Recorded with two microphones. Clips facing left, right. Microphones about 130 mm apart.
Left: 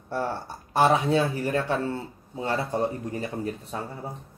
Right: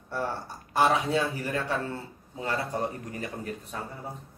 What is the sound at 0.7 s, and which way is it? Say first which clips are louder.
Speech: left 3 dB; 30° left (ahead or behind).